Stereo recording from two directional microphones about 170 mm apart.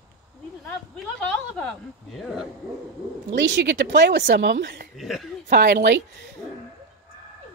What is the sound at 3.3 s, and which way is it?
Speech, 90° right.